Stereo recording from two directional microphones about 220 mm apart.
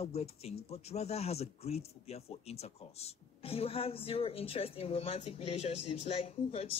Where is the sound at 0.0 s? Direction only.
30° left (ahead or behind).